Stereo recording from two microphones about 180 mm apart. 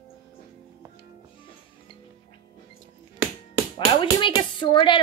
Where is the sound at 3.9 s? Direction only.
25° left (ahead or behind).